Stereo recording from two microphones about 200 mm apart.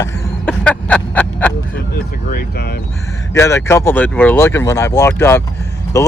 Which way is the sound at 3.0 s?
15° left (ahead or behind).